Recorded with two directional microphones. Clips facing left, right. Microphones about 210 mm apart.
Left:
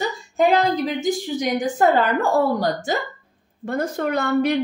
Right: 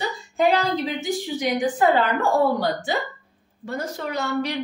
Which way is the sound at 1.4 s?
45° left (ahead or behind).